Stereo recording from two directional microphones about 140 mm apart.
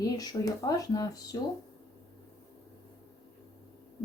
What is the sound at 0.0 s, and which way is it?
A woman's voice, 25° left (ahead or behind).